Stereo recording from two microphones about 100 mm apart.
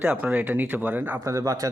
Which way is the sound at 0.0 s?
15° right (ahead or behind).